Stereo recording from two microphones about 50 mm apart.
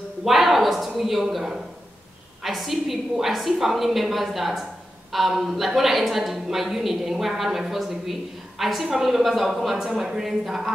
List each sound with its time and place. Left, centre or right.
0.2 s a woman's voice: centre